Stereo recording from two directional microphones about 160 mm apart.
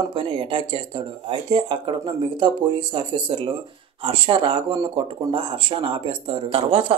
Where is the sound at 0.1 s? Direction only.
35° right (ahead or behind).